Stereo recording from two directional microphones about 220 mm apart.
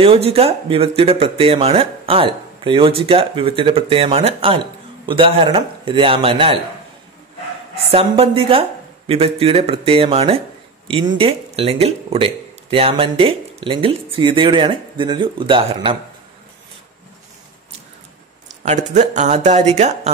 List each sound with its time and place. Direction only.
0.0 s speech: 25° right (ahead or behind)
7.9 s speech: 25° right (ahead or behind)
18.6 s speech: 35° right (ahead or behind)